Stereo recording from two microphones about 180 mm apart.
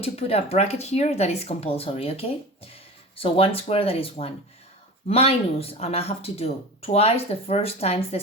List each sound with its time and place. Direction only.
0.0 s speech: 35° left (ahead or behind)